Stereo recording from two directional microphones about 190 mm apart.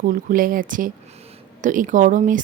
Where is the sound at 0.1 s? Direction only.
45° right (ahead or behind).